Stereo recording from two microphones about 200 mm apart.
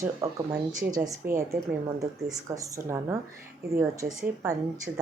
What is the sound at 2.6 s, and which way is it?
A woman's voice, 15° right (ahead or behind).